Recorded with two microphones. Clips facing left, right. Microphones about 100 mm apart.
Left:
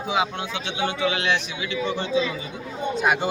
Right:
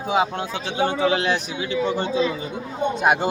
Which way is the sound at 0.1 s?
40° right (ahead or behind).